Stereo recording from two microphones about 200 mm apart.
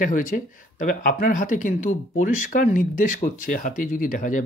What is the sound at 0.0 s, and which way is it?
Speech, 40° left (ahead or behind).